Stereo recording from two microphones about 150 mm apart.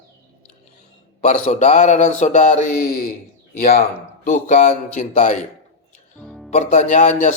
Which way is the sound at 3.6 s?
80° left.